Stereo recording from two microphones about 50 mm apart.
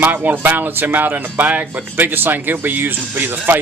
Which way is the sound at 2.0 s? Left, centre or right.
Right.